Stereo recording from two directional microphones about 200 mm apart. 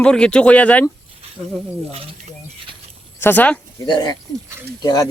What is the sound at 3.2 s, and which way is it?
Speech, 10° left (ahead or behind).